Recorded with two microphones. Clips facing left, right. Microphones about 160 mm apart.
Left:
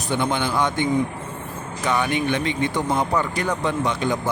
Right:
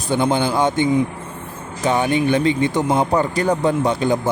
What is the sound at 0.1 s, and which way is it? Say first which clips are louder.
Speech: right 5 dB; 35° right (ahead or behind).